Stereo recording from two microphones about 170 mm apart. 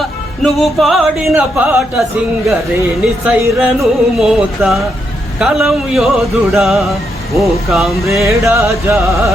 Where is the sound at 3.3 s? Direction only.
10° right (ahead or behind).